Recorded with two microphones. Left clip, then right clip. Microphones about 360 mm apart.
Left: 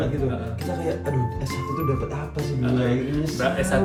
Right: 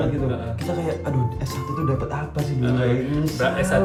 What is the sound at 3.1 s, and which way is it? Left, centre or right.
Speech, centre.